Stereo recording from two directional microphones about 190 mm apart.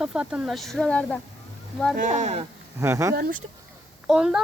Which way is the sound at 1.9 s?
40° right (ahead or behind).